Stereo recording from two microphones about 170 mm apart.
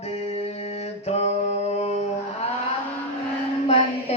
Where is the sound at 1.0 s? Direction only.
40° left (ahead or behind).